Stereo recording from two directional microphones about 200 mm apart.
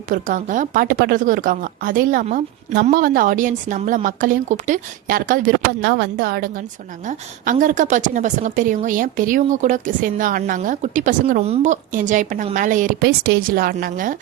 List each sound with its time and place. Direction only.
0.1 s a woman's voice: 40° right (ahead or behind)
5.8 s a woman's voice: 60° right (ahead or behind)
7.1 s a woman's voice: 40° right (ahead or behind)